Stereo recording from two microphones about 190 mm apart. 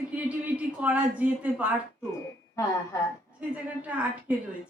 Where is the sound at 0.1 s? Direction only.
5° right (ahead or behind).